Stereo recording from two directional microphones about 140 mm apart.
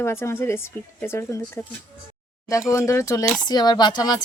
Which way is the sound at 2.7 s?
20° left (ahead or behind).